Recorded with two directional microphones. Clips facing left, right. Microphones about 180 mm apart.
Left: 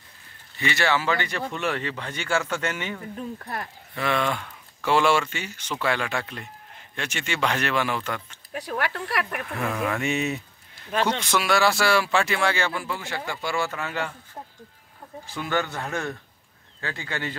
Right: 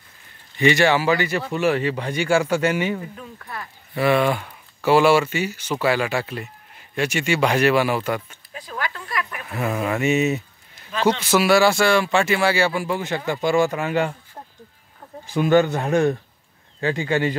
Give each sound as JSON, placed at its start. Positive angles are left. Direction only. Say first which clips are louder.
{"t": 0.6, "sound": "speech", "louder": "right 7 dB", "side_deg": -15}
{"t": 3.2, "sound": "speech", "louder": "left 4 dB", "side_deg": 35}
{"t": 3.9, "sound": "speech", "louder": "right 7 dB", "side_deg": -10}
{"t": 8.5, "sound": "a sound", "louder": "left 2 dB", "side_deg": 65}
{"t": 9.6, "sound": "mantra", "louder": "right 5 dB", "side_deg": -10}
{"t": 11.1, "sound": "speech", "louder": "right 6 dB", "side_deg": -5}
{"t": 15.3, "sound": "a man's voice", "louder": "right 11 dB", "side_deg": -20}